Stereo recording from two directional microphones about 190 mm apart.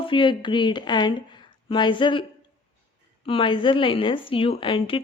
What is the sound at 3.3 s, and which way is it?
Speech, 25° left (ahead or behind).